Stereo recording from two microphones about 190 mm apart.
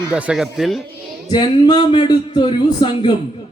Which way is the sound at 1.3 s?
25° left (ahead or behind).